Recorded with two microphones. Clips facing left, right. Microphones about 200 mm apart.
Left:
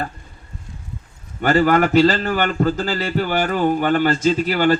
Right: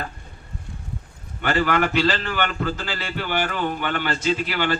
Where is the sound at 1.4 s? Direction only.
40° left (ahead or behind).